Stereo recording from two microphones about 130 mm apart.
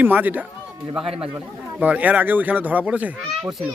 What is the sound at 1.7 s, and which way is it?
Speech, 10° right (ahead or behind).